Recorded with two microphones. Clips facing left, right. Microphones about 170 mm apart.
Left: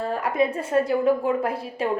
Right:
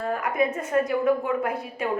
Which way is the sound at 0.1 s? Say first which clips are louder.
Left 1 dB; 30° left (ahead or behind).